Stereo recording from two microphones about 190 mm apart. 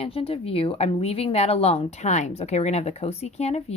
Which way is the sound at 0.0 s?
30° left (ahead or behind).